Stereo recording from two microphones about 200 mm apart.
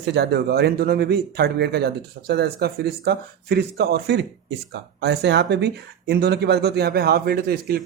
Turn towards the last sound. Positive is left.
turn(degrees=-50)  # may be behind; listen again after turning